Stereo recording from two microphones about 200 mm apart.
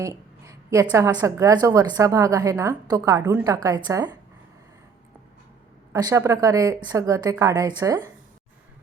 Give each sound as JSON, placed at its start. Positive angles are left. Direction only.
{"t": 0.0, "sound": "a woman's voice", "side_deg": -15}
{"t": 5.9, "sound": "a woman's voice", "side_deg": -15}